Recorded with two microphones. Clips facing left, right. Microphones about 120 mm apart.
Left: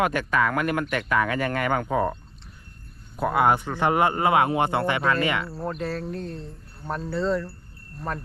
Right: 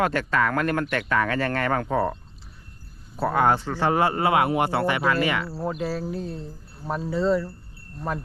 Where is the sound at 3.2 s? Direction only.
10° left (ahead or behind).